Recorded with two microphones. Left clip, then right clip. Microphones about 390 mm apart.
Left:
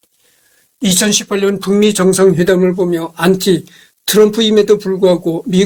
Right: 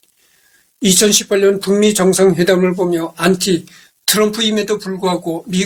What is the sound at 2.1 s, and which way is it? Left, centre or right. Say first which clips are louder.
Speech: left 2 dB; left.